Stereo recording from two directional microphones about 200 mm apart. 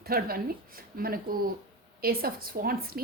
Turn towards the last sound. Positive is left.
turn(degrees=-50)  # may be behind; listen again after turning